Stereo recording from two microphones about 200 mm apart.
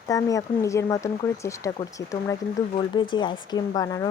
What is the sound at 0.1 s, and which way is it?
Speech, 15° left (ahead or behind).